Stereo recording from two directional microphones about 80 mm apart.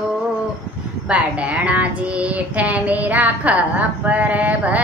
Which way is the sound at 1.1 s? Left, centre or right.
Centre.